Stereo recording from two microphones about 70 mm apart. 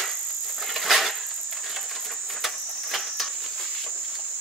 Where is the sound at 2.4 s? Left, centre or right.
Centre.